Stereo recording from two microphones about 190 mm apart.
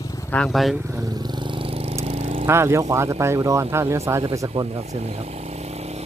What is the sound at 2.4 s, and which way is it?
Speech, 15° right (ahead or behind).